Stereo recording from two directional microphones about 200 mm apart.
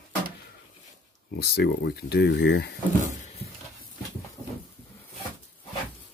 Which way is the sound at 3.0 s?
35° left (ahead or behind).